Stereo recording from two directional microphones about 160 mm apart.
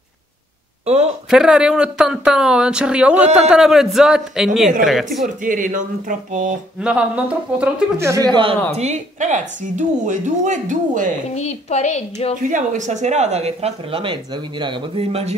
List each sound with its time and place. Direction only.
0.8 s speech: 40° right (ahead or behind)
1.3 s speech: 5° right (ahead or behind)
5.2 s speech: 55° right (ahead or behind)
6.8 s speech: 5° right (ahead or behind); by 8.5 s 30° right (ahead or behind)
8.7 s a woman's voice: 45° right (ahead or behind)
11.3 s a woman's voice: 45° left (ahead or behind)
12.4 s speech: 55° right (ahead or behind)